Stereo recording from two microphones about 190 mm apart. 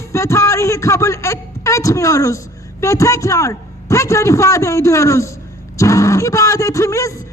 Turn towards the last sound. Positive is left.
turn(degrees=15)  # may be behind; listen again after turning